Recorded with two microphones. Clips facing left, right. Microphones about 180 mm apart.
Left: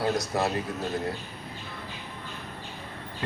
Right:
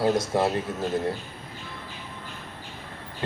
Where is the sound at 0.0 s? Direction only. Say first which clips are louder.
Right 4 dB; 25° right (ahead or behind).